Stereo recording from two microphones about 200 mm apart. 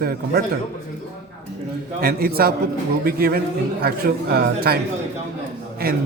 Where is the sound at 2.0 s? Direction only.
50° right (ahead or behind).